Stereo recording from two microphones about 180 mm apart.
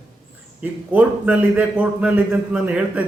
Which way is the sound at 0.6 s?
10° right (ahead or behind).